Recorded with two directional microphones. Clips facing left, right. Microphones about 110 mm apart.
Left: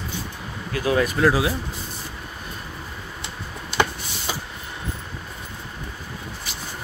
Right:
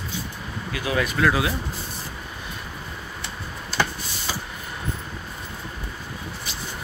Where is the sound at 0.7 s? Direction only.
40° left (ahead or behind).